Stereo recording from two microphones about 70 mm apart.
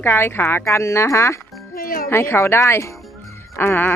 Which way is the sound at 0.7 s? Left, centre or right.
Left.